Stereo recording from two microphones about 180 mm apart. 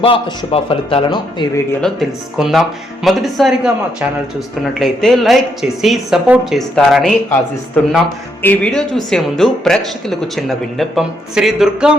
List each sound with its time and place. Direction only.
0.0 s a man's voice: 30° left (ahead or behind)
1.8 s speech: centre (ahead or behind)
4.8 s speech: centre (ahead or behind)
8.4 s speech: 10° left (ahead or behind)